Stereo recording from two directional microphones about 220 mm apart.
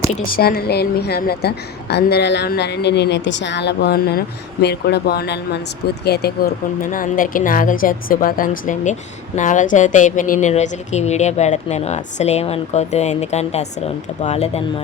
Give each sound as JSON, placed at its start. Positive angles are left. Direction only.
{"t": 0.1, "sound": "a woman's voice", "side_deg": 40}